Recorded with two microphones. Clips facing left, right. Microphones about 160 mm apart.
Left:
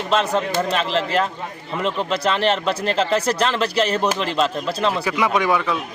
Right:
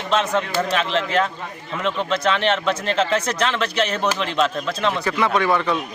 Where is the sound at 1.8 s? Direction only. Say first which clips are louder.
Right 1 dB; 35° left (ahead or behind).